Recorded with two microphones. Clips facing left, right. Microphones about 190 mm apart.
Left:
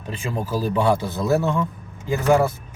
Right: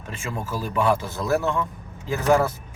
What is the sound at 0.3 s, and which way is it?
Speech, 25° left (ahead or behind).